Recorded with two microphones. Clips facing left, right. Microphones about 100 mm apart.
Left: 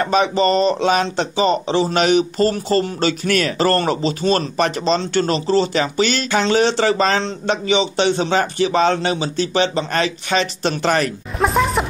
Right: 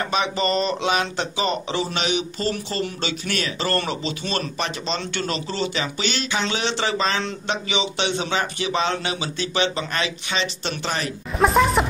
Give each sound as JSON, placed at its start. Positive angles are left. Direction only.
{"t": 0.0, "sound": "speech", "side_deg": 40}
{"t": 2.0, "sound": "speech", "side_deg": 45}
{"t": 11.3, "sound": "a sound", "side_deg": 0}